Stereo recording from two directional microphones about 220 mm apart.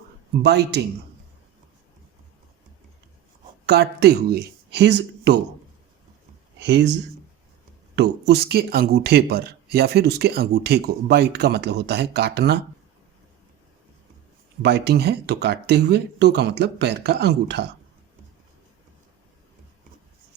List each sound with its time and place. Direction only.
0.4 s speech: 50° right (ahead or behind)
3.7 s speech: 45° right (ahead or behind)
6.6 s speech: 50° right (ahead or behind)
7.9 s speech: 50° right (ahead or behind)
14.6 s speech: 50° right (ahead or behind)